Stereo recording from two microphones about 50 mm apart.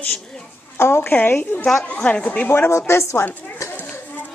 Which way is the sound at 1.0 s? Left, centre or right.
Left.